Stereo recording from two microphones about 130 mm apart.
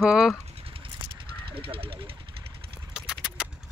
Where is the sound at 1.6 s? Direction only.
45° right (ahead or behind).